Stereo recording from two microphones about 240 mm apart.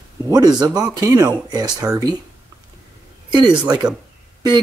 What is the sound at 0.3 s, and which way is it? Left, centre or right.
Speech, centre.